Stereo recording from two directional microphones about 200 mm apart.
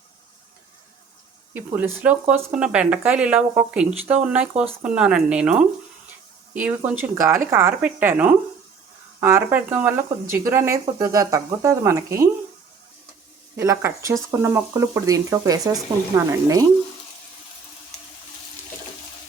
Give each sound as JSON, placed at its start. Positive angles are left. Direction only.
{"t": 1.5, "sound": "speech", "side_deg": -10}
{"t": 13.6, "sound": "speech", "side_deg": -15}